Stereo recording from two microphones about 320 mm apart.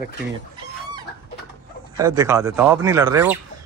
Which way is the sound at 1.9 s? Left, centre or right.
Centre.